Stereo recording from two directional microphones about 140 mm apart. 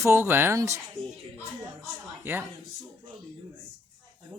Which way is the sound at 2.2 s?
15° right (ahead or behind).